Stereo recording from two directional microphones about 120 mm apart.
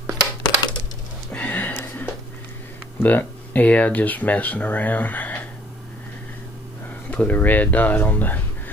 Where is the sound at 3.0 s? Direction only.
15° left (ahead or behind).